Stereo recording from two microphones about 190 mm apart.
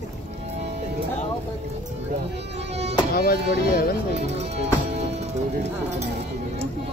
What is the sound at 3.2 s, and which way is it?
Speech, 50° left (ahead or behind).